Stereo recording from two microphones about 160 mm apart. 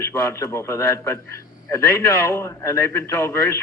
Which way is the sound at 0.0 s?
20° left (ahead or behind).